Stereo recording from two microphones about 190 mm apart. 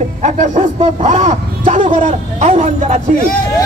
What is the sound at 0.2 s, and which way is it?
A man's voice, 40° right (ahead or behind).